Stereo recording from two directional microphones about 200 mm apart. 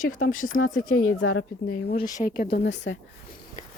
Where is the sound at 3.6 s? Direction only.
40° left (ahead or behind).